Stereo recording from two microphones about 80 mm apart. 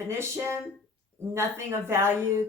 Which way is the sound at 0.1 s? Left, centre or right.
Right.